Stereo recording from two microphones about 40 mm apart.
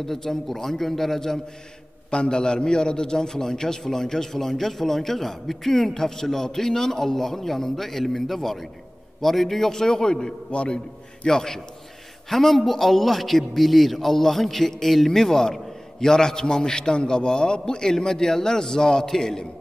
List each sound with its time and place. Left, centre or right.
0.0 s a man's voice: centre
2.0 s a man's voice: left
10.5 s a man's voice: left
11.2 s a man's voice: centre